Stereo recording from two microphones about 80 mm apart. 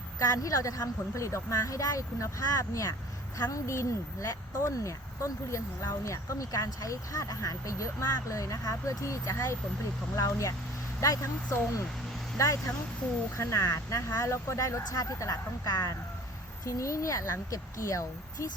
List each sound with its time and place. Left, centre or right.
0.2 s a woman's voice: left
12.4 s a woman's voice: left